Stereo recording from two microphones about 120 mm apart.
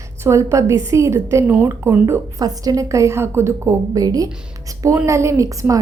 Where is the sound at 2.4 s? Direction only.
30° right (ahead or behind).